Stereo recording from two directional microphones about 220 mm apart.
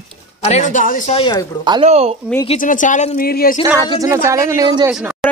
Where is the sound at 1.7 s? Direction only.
25° right (ahead or behind).